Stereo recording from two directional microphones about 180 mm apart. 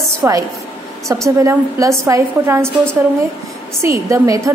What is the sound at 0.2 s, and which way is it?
A woman's voice, 10° right (ahead or behind).